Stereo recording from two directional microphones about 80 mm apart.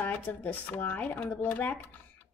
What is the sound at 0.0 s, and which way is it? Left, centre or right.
Speech, left.